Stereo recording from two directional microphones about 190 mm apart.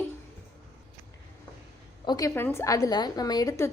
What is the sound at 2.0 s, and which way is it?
A woman's voice, 20° left (ahead or behind).